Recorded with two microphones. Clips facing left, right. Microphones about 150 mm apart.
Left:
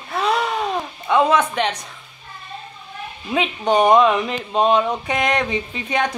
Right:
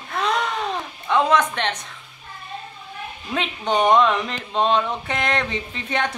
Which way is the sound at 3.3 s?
5° left (ahead or behind).